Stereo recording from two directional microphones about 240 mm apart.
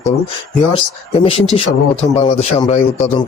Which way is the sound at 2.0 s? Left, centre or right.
Left.